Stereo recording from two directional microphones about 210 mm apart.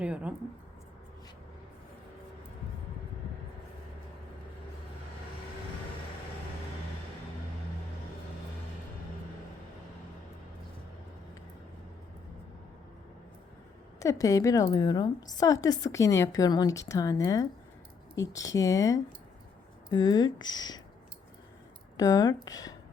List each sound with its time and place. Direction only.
0.0 s speech: 5° right (ahead or behind)
14.0 s a woman's voice: 15° left (ahead or behind)
21.9 s a woman's voice: 20° left (ahead or behind)